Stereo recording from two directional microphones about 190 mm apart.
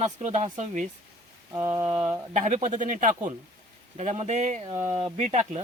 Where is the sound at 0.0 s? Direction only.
35° right (ahead or behind).